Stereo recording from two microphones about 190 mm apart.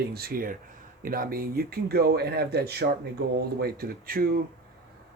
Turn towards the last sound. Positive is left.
turn(degrees=-50)  # may be behind; listen again after turning